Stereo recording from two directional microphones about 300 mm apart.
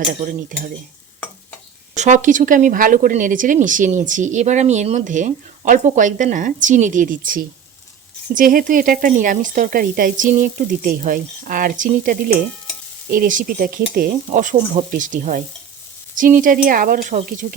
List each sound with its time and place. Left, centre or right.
0.3 s speech: right
2.0 s speech: right